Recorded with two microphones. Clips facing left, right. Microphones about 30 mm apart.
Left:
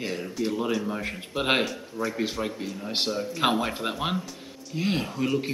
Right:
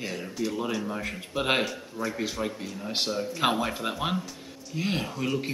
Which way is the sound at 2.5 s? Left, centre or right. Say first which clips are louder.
Left 2 dB; centre.